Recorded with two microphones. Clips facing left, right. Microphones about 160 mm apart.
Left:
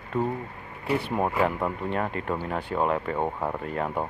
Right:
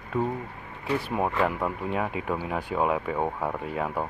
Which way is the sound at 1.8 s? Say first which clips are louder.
Even; 5° right (ahead or behind).